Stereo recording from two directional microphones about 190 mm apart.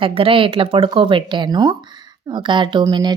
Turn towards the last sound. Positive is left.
turn(degrees=-20)  # may be behind; listen again after turning